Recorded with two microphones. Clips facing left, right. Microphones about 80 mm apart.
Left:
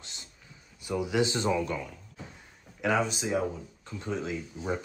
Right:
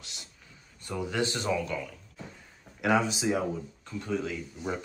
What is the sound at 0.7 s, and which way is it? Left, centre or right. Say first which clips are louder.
Speech: left 3 dB; centre.